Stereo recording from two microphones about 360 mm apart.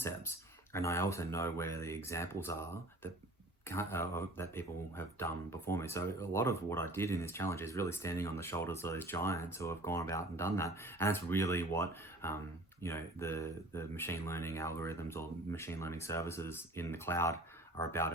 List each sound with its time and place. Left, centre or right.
0.0 s speech: centre